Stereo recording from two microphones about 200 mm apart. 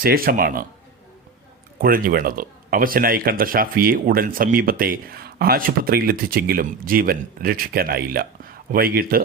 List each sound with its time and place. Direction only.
0.0 s speech: 45° right (ahead or behind)
1.8 s speech: 45° right (ahead or behind)